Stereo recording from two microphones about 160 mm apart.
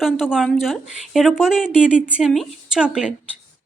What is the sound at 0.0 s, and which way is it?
Speech, centre (ahead or behind).